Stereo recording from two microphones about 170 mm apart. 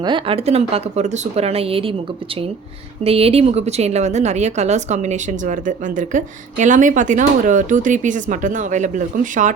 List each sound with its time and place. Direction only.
0.0 s a woman's voice: 30° right (ahead or behind); by 9.5 s 50° right (ahead or behind)